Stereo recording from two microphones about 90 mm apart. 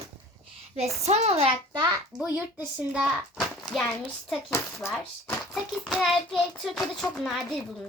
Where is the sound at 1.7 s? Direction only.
55° right (ahead or behind).